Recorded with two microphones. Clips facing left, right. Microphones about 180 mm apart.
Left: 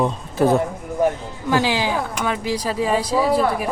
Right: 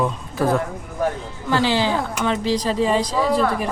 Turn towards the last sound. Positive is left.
turn(degrees=10)  # may be behind; listen again after turning